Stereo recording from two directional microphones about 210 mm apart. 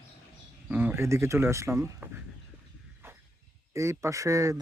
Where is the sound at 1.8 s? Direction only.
5° right (ahead or behind).